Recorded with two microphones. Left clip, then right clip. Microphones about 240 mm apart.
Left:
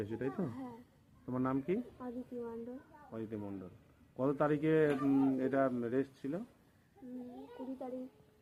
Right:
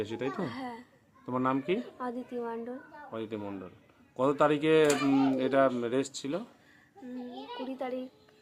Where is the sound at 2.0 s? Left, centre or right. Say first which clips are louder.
Right 8 dB; right.